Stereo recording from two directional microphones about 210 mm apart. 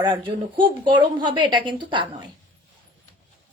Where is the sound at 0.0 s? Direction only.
20° right (ahead or behind).